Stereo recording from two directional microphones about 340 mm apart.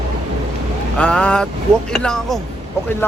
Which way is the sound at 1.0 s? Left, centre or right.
Centre.